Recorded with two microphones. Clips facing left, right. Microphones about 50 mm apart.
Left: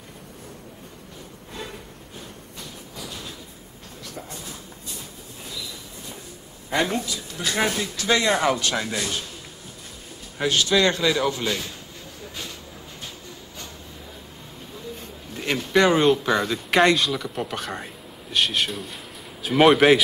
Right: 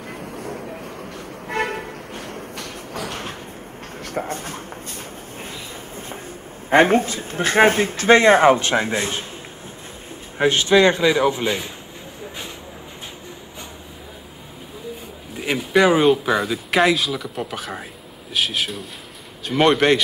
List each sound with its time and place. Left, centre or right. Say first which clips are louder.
0.4 s a sound: right 13 dB; right
1.5 s vehicle: right 13 dB; right
2.5 s a sound: right 8 dB; right
5.4 s train: right 1 dB; right
6.7 s speech: right 9 dB; right
10.3 s a man's voice: right 5 dB; right
15.3 s speech: right 2 dB; centre